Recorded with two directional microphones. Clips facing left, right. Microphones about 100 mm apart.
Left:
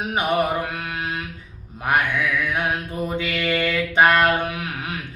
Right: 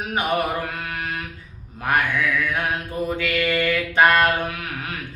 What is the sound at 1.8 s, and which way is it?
Speech, 15° left (ahead or behind).